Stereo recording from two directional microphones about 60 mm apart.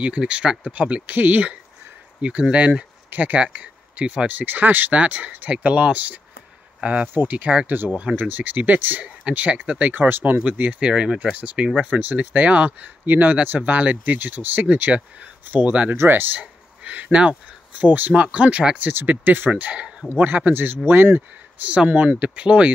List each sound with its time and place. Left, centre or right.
0.0 s speech: centre
4.3 s speech: right
7.9 s speech: centre; by 10.4 s right
10.4 s speech: centre
16.0 s speech: right
16.3 s speech: right
19.6 s speech: right
21.6 s speech: right